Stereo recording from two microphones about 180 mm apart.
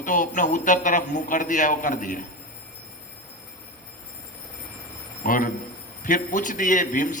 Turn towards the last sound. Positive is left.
turn(degrees=45)  # may be behind; listen again after turning